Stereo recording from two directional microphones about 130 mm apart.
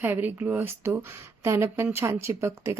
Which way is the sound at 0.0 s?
15° right (ahead or behind).